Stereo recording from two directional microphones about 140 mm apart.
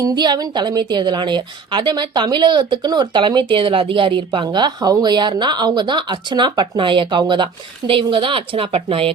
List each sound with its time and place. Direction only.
0.0 s a woman's voice: 30° right (ahead or behind)